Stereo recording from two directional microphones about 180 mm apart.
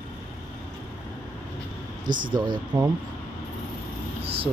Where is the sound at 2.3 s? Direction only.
25° right (ahead or behind).